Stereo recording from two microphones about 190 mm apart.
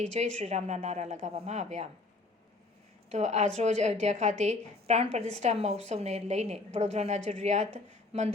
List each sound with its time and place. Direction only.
0.0 s a woman's voice: 35° right (ahead or behind)
3.1 s a woman's voice: 35° right (ahead or behind)